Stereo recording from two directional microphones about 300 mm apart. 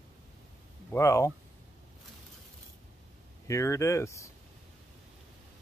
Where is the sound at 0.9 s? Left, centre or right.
Centre.